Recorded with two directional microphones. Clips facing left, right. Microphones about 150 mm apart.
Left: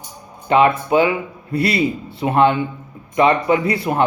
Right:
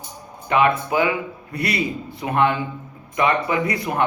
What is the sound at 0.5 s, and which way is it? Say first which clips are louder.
Speech: left 4 dB; 25° left (ahead or behind).